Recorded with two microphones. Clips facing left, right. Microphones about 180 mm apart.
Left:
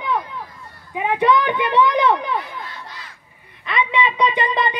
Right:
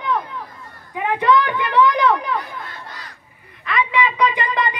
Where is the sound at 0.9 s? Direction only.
20° left (ahead or behind).